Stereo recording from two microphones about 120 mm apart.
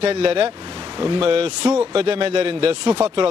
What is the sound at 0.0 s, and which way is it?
A man's voice, 50° right (ahead or behind).